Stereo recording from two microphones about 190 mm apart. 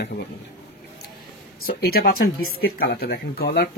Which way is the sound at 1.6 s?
50° left (ahead or behind).